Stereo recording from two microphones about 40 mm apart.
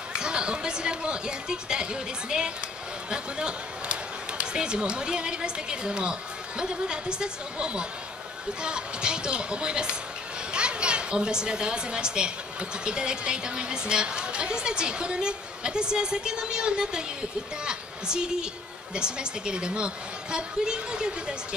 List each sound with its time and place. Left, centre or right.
0.1 s a woman's voice: right